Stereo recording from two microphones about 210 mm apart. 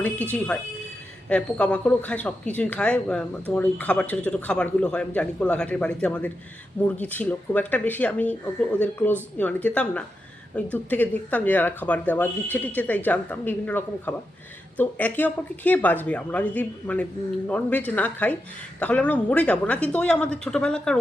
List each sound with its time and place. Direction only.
0.0 s speech: 5° left (ahead or behind)